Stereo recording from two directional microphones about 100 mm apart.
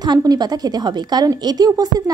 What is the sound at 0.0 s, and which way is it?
A woman's voice, 40° right (ahead or behind).